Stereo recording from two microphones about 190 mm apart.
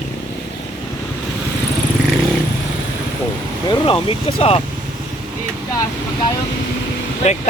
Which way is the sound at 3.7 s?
30° left (ahead or behind).